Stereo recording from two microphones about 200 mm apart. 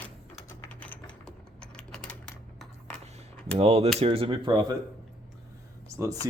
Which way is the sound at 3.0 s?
30° right (ahead or behind).